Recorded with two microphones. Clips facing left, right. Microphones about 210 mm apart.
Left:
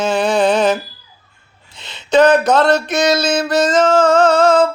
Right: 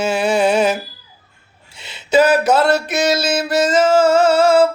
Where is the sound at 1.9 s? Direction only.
5° right (ahead or behind).